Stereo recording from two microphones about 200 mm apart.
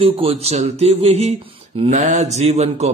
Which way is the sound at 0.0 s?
30° right (ahead or behind).